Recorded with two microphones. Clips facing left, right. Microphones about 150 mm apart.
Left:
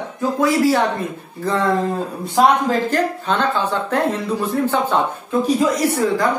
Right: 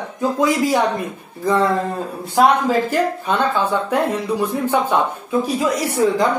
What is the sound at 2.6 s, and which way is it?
A woman's voice, 10° right (ahead or behind).